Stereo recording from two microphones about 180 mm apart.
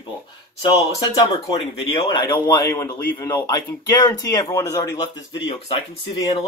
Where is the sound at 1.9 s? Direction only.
25° left (ahead or behind).